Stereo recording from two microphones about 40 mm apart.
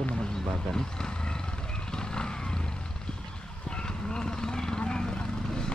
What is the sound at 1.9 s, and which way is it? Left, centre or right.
Vehicle, centre.